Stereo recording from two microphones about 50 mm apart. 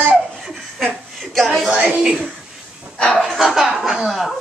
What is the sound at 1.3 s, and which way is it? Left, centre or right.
Speech, centre.